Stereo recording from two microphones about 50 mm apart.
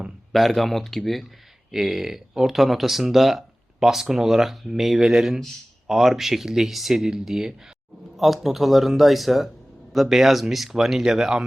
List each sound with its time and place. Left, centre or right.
0.3 s speech: centre